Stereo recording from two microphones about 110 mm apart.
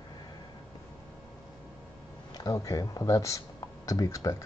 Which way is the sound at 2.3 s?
30° left (ahead or behind).